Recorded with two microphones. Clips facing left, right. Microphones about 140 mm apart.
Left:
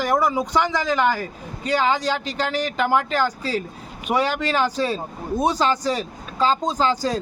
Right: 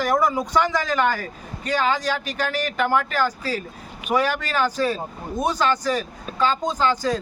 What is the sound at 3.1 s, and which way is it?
Speech, 25° left (ahead or behind).